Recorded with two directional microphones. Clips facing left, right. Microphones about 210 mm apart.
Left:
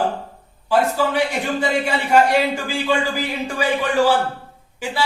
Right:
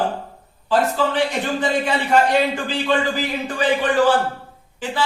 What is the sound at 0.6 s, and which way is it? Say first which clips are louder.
A man's voice: left 1 dB; 10° left (ahead or behind).